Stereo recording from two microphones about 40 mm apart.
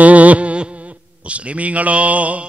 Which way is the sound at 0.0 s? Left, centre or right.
Right.